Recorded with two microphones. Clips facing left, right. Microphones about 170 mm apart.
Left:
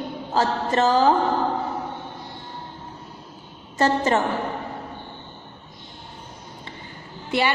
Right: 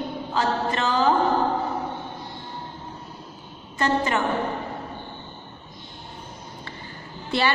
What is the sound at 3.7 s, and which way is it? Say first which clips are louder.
Speech: left 3 dB; 35° left (ahead or behind).